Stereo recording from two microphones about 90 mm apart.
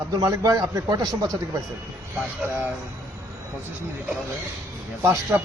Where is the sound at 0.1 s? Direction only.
40° right (ahead or behind).